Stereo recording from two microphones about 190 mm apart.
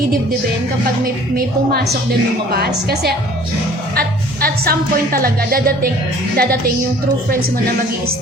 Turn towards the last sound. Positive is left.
turn(degrees=-50)  # may be behind; listen again after turning